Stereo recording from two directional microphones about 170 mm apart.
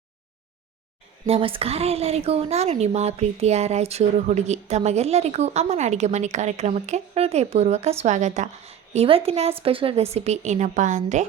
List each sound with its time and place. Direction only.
1.3 s a woman's voice: 30° right (ahead or behind)